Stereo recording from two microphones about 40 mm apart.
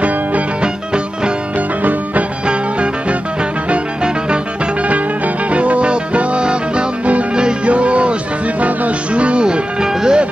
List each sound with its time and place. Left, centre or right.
0.6 s music: right
1.8 s music: right
2.4 s music: right
4.8 s music: right; by 10.2 s centre